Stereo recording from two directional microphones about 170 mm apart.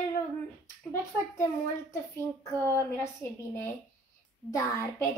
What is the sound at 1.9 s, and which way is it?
A child's voice, 15° left (ahead or behind).